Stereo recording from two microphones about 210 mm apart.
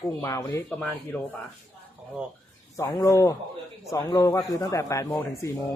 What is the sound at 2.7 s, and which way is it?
Speech, 15° left (ahead or behind).